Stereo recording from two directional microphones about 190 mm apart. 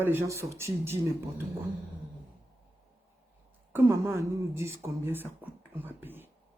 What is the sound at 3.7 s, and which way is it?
Speech, 10° right (ahead or behind).